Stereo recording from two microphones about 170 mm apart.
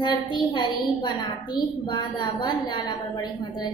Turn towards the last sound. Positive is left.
turn(degrees=25)  # may be behind; listen again after turning